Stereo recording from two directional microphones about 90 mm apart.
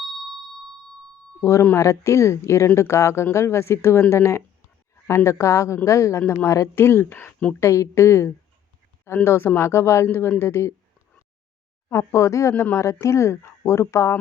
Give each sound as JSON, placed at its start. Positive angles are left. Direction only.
{"t": 0.1, "sound": "a sound", "side_deg": 0}
{"t": 1.8, "sound": "speech", "side_deg": 35}
{"t": 7.6, "sound": "speech", "side_deg": 35}
{"t": 11.9, "sound": "speech", "side_deg": 35}